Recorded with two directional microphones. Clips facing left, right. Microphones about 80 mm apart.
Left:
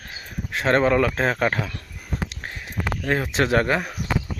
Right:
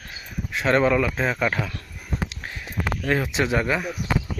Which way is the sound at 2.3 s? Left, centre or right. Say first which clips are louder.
Even; left.